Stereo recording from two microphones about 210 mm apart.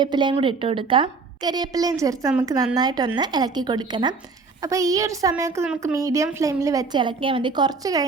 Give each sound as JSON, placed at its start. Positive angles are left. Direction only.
{"t": 0.0, "sound": "a woman's voice", "side_deg": -20}